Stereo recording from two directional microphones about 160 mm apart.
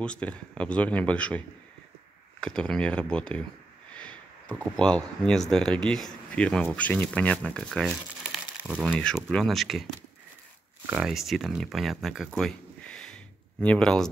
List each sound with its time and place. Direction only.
0.0 s speech: 5° left (ahead or behind)
2.4 s speech: 5° left (ahead or behind)
3.9 s a sound: 5° left (ahead or behind)
4.7 s speech: 5° left (ahead or behind)
10.9 s speech: 5° right (ahead or behind)
12.4 s a sound: 5° left (ahead or behind)